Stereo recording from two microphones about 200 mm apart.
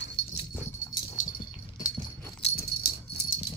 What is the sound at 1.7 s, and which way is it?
Dog, 20° left (ahead or behind).